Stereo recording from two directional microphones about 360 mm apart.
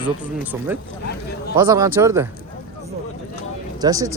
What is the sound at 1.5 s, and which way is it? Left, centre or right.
Speech, centre.